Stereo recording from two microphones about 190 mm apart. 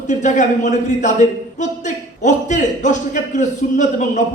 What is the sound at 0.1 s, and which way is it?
A man's voice, 40° left (ahead or behind).